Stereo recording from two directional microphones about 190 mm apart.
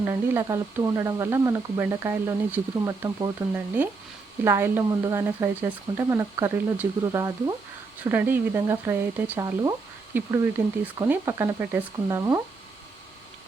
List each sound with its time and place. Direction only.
0.0 s speech: 15° right (ahead or behind)